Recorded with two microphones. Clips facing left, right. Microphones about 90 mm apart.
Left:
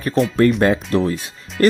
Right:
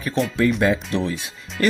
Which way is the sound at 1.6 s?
45° left (ahead or behind).